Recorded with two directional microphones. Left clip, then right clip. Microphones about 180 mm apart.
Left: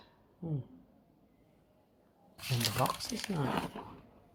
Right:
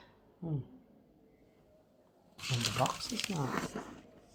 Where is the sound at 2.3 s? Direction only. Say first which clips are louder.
Even; 30° left (ahead or behind).